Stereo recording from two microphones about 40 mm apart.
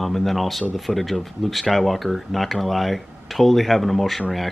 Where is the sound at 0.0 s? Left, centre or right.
Centre.